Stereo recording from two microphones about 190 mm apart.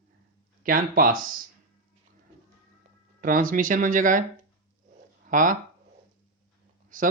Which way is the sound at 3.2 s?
45° right (ahead or behind).